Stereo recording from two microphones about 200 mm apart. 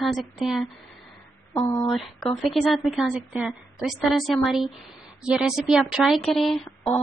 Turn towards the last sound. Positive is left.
turn(degrees=0)  # may be behind; listen again after turning